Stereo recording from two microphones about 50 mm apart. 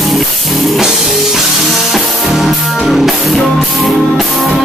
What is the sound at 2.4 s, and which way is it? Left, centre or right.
Music, centre.